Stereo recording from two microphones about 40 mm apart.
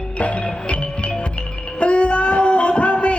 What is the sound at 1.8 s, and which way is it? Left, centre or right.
Music, left.